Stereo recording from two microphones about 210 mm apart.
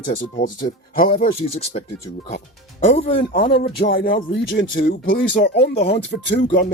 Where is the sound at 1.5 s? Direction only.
30° left (ahead or behind).